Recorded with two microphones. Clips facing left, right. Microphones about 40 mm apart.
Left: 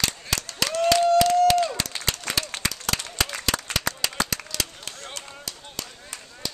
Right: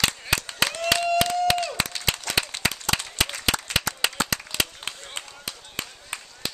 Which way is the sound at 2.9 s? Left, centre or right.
Right.